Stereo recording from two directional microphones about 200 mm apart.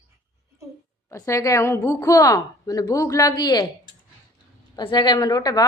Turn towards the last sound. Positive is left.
turn(degrees=20)  # may be behind; listen again after turning